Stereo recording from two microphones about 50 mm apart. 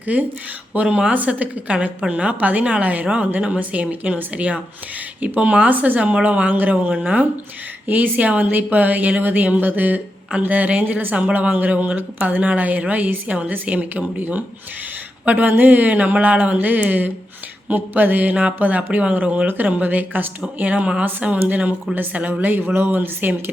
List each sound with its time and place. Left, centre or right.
0.0 s speech: right
0.9 s a woman's voice: right
11.3 s a woman's voice: right